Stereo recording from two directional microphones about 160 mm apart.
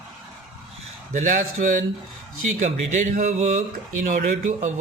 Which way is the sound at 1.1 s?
50° right (ahead or behind).